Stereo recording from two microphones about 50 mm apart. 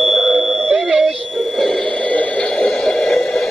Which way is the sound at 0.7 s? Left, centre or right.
Centre.